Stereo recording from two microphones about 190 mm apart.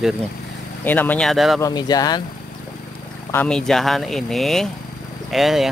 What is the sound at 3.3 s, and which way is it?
Speech, 5° left (ahead or behind).